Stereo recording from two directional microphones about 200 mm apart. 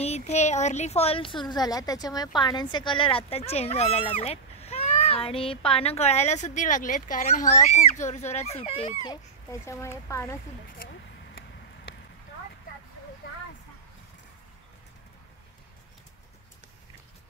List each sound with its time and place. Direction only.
0.0 s speech: 35° left (ahead or behind); by 10.3 s 15° left (ahead or behind)